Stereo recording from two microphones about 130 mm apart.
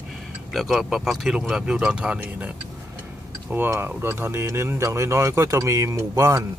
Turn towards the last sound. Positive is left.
turn(degrees=-25)  # may be behind; listen again after turning